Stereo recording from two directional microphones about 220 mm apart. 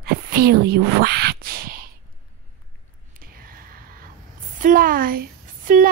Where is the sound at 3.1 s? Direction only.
40° right (ahead or behind).